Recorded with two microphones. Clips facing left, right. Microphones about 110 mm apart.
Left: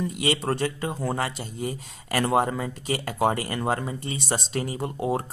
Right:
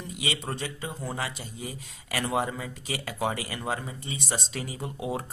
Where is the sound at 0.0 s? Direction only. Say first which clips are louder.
Left 8 dB; 55° left (ahead or behind).